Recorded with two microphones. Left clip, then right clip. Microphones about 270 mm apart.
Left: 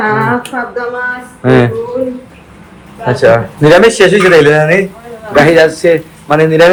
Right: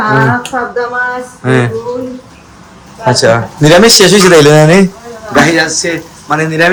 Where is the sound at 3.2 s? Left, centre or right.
Centre.